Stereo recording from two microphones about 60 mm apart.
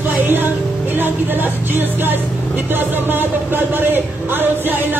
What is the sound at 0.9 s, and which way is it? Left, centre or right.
Speech, right.